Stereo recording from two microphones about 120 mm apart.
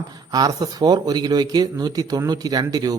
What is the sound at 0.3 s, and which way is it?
A man's voice, 35° right (ahead or behind).